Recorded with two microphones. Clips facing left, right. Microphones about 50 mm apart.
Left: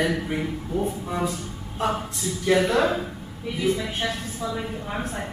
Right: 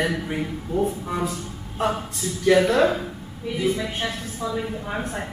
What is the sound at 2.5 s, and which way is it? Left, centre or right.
A woman's voice, centre.